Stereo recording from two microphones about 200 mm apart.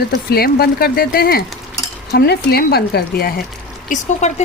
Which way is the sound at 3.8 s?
35° left (ahead or behind).